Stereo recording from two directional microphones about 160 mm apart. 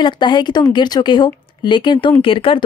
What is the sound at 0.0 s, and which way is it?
A woman's voice, 30° left (ahead or behind).